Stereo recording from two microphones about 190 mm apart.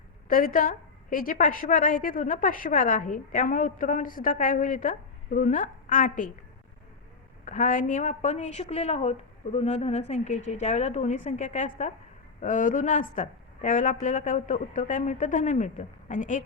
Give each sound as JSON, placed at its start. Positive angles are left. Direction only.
{"t": 0.3, "sound": "a woman's voice", "side_deg": 45}
{"t": 7.4, "sound": "a woman's voice", "side_deg": 40}